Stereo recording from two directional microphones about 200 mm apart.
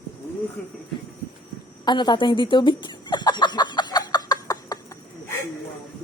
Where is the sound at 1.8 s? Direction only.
20° left (ahead or behind).